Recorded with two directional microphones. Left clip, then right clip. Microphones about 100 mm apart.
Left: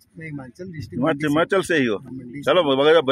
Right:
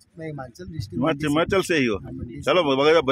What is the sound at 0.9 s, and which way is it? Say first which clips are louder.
Speech: left 2 dB; 15° right (ahead or behind).